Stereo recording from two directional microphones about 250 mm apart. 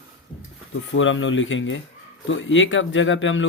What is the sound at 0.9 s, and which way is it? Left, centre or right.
Speech, left.